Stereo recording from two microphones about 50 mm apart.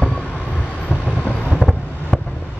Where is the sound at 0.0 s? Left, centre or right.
Left.